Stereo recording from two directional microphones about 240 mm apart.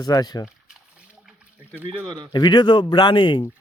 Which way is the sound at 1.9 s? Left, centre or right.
Right.